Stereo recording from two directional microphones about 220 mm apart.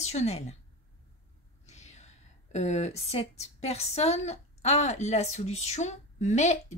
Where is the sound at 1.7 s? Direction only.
30° left (ahead or behind).